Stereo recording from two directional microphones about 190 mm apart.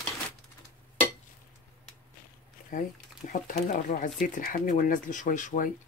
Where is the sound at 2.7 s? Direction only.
45° left (ahead or behind).